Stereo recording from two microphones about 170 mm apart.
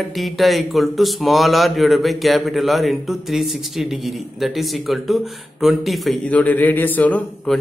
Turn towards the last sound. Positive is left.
turn(degrees=10)  # may be behind; listen again after turning